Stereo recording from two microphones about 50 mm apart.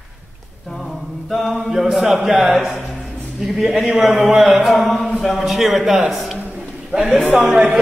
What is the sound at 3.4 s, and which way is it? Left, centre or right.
Speech, centre.